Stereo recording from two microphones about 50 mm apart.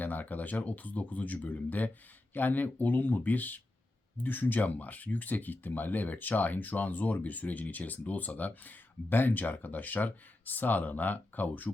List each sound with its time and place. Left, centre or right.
0.0 s speech: left